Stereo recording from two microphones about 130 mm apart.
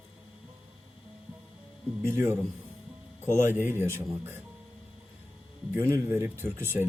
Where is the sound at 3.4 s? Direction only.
15° right (ahead or behind).